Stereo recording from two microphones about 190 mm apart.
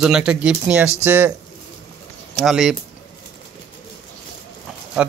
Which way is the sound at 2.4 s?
Centre (ahead or behind).